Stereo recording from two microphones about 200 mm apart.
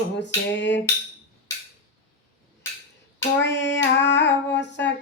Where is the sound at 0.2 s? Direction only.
60° left (ahead or behind).